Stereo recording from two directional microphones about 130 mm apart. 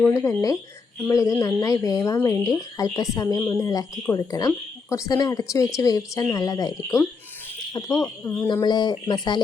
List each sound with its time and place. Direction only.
0.0 s speech: 20° left (ahead or behind)